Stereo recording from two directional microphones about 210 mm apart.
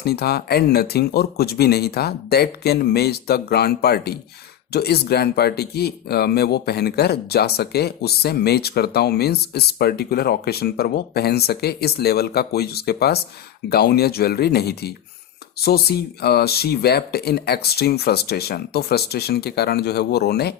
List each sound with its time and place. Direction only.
0.0 s speech: 50° left (ahead or behind)